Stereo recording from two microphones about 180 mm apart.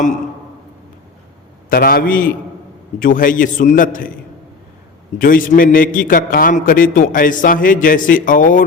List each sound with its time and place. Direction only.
1.7 s a man's voice: 55° left (ahead or behind)
5.2 s a man's voice: 50° left (ahead or behind)